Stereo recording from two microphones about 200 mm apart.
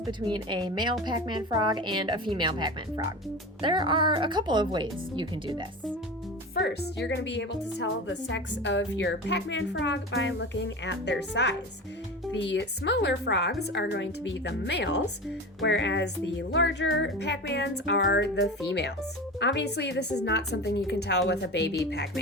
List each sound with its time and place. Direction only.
0.0 s speech: 20° right (ahead or behind)
6.5 s a woman's voice: 55° left (ahead or behind)